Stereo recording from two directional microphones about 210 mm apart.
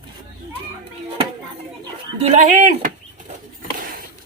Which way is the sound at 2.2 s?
35° right (ahead or behind).